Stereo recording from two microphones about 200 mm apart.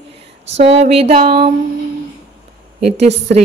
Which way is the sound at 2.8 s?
35° right (ahead or behind).